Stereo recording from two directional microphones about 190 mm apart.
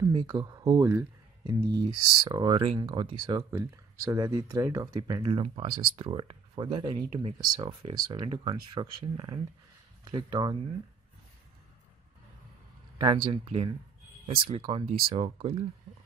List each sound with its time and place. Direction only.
0.0 s speech: 20° right (ahead or behind)
12.9 s speech: 25° right (ahead or behind)